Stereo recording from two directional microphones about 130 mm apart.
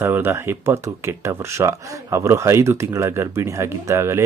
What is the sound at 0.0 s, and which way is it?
Speech, 15° right (ahead or behind).